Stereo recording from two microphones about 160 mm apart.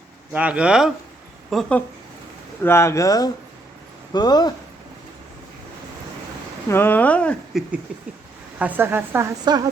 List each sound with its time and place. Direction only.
0.3 s a woman's voice: 10° right (ahead or behind)
2.6 s speech: 15° left (ahead or behind)
6.7 s a woman's voice: 15° left (ahead or behind); by 9.2 s 15° right (ahead or behind)
9.4 s a woman's voice: 25° right (ahead or behind)